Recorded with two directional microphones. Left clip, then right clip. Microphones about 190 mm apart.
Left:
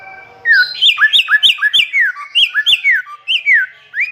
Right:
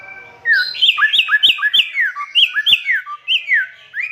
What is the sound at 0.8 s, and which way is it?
Bird, 15° left (ahead or behind).